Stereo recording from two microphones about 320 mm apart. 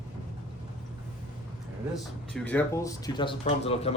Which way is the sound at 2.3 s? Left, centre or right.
Centre.